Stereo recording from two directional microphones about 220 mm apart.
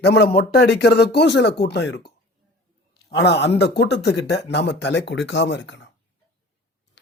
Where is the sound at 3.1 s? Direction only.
50° left (ahead or behind).